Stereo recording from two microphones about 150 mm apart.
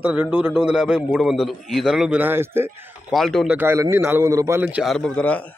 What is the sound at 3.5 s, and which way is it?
A man's voice, 15° right (ahead or behind).